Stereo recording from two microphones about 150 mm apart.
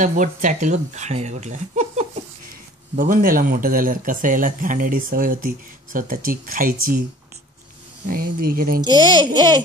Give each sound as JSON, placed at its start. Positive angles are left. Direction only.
{"t": 0.0, "sound": "speech", "side_deg": -55}
{"t": 3.0, "sound": "speech", "side_deg": -70}
{"t": 8.1, "sound": "speech", "side_deg": -75}
{"t": 8.8, "sound": "speech", "side_deg": -30}